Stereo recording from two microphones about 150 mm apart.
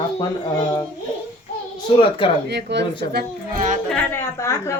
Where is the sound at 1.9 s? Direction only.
35° left (ahead or behind).